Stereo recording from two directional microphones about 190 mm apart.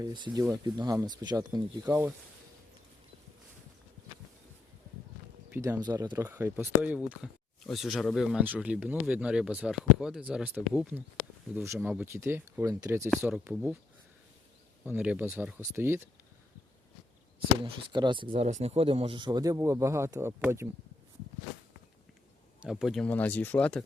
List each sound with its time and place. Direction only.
0.0 s speech: 20° right (ahead or behind)
1.9 s speech: 10° right (ahead or behind)
5.5 s speech: 15° right (ahead or behind)
14.8 s speech: 10° right (ahead or behind)
17.9 s speech: 25° right (ahead or behind)
22.6 s speech: 5° right (ahead or behind)